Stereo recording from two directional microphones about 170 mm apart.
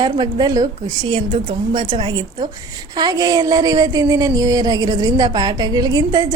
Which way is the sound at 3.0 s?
20° right (ahead or behind).